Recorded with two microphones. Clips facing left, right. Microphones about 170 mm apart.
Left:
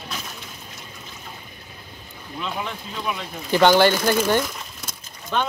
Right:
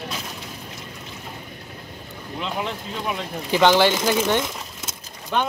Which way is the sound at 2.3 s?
25° right (ahead or behind).